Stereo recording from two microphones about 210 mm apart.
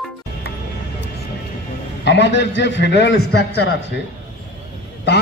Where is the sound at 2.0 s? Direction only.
55° left (ahead or behind).